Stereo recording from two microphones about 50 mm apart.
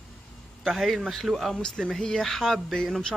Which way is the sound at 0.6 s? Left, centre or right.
Centre.